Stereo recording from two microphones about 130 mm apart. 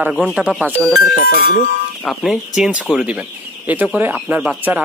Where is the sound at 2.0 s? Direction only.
5° right (ahead or behind).